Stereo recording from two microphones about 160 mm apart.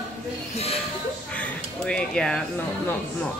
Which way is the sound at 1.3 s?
5° left (ahead or behind).